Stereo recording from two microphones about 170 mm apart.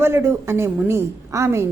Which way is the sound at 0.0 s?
15° right (ahead or behind).